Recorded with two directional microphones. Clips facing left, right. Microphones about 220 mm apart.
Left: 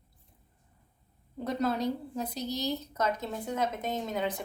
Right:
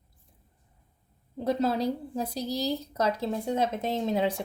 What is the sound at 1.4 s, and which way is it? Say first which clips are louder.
Speech: right 3 dB; 30° right (ahead or behind).